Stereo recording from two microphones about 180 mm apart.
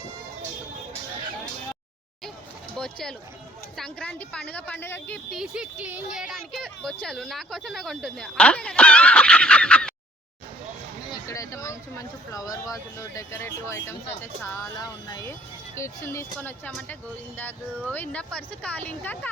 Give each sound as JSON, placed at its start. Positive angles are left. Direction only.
{"t": 2.7, "sound": "speech", "side_deg": 5}
{"t": 11.3, "sound": "speech", "side_deg": 15}